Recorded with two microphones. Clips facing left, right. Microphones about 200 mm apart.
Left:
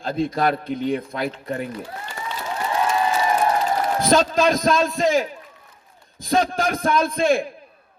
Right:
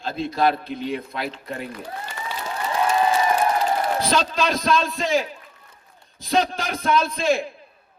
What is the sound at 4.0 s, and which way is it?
A man's voice, 45° left (ahead or behind).